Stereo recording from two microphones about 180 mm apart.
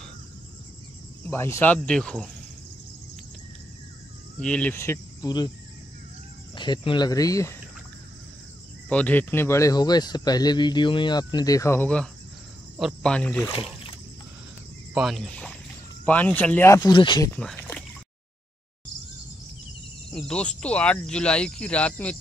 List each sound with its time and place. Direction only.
1.2 s speech: 15° left (ahead or behind)
4.4 s speech: 5° left (ahead or behind); by 5.5 s 20° left (ahead or behind)
6.5 s speech: 25° left (ahead or behind)
8.8 s speech: 10° left (ahead or behind)
15.0 s speech: centre (ahead or behind); by 17.3 s 25° left (ahead or behind)
17.3 s a sound: 10° left (ahead or behind)
20.1 s speech: 5° left (ahead or behind)